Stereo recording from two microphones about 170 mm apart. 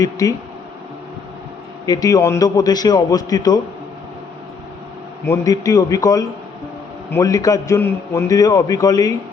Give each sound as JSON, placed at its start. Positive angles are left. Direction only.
{"t": 0.0, "sound": "a man's voice", "side_deg": 20}
{"t": 1.9, "sound": "a man's voice", "side_deg": 20}
{"t": 5.2, "sound": "a man's voice", "side_deg": 20}